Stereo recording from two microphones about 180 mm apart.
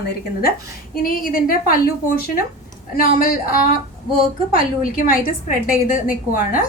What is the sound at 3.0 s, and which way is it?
A woman's voice, 55° left (ahead or behind).